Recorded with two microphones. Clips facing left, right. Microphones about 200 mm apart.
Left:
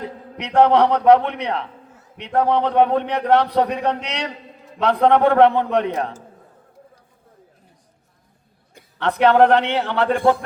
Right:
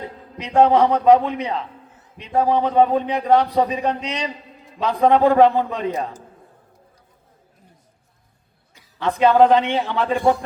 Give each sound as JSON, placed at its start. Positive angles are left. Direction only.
{"t": 0.3, "sound": "a man's voice", "side_deg": 70}
{"t": 8.7, "sound": "a man's voice", "side_deg": 65}